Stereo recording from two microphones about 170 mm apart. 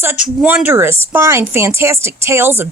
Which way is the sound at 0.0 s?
10° right (ahead or behind).